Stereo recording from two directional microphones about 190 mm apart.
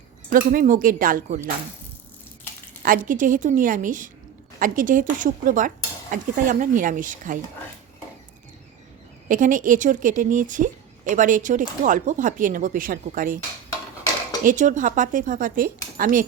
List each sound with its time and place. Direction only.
0.3 s speech: 45° right (ahead or behind)
2.8 s speech: 45° right (ahead or behind)
9.3 s speech: 45° right (ahead or behind)
14.4 s speech: 40° right (ahead or behind)